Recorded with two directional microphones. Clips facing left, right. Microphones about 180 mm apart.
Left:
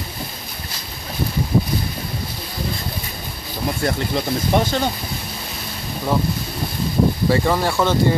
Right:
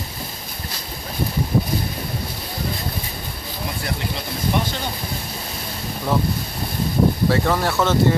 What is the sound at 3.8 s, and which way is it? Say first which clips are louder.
Speech: left 8 dB; 50° left (ahead or behind).